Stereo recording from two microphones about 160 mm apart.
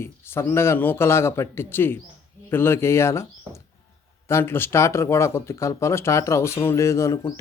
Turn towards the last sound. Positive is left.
turn(degrees=20)  # may be behind; listen again after turning